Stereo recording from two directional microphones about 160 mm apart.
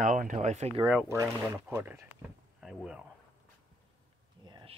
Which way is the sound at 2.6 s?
5° right (ahead or behind).